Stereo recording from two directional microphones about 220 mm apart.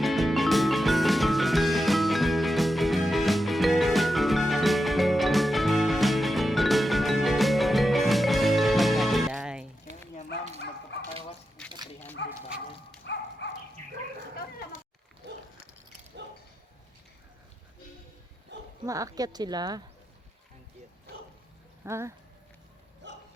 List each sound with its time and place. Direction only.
0.0 s music: centre (ahead or behind)
12.2 s bow-wow: 55° left (ahead or behind)
13.1 s dog: 55° left (ahead or behind)
18.5 s dog: 50° right (ahead or behind)
18.9 s speech: 15° right (ahead or behind)
21.8 s speech: 10° right (ahead or behind)